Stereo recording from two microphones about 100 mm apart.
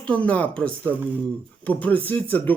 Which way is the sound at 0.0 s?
15° left (ahead or behind).